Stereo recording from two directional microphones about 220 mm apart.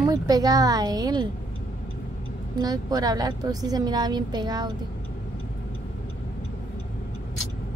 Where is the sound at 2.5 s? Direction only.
15° right (ahead or behind).